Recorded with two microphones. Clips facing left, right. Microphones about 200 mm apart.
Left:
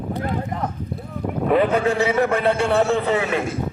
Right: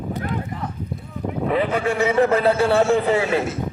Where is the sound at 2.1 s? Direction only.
30° right (ahead or behind).